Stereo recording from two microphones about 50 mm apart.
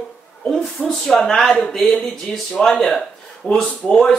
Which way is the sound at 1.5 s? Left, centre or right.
Centre.